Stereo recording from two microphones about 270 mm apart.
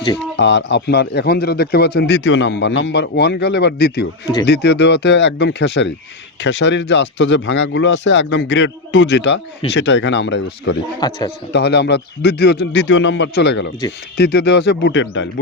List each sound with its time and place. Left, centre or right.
0.3 s a man's voice: left
11.0 s a man's voice: centre
11.5 s a man's voice: left